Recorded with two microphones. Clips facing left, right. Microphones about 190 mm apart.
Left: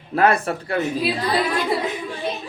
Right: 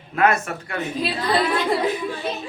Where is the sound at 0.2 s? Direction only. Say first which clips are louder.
Left 2 dB; 35° left (ahead or behind).